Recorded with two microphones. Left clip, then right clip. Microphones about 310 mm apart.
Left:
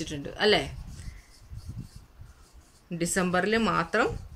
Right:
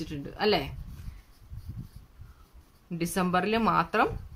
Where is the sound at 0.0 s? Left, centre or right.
Centre.